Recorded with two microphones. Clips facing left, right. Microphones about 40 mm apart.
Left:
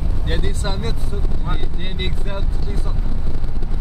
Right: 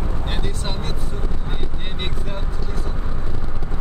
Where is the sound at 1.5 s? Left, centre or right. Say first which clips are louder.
Left 2 dB; centre.